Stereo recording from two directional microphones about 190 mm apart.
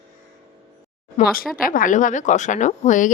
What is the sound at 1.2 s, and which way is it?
Speech, 35° left (ahead or behind).